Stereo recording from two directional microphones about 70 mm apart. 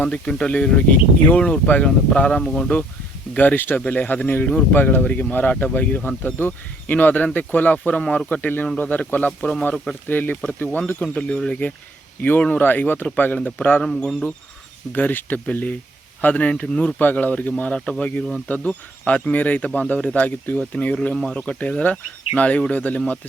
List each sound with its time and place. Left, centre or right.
0.0 s speech: centre
2.4 s speech: centre
3.3 s speech: left
10.1 s speech: left
13.8 s speech: centre
14.9 s speech: left
23.0 s speech: centre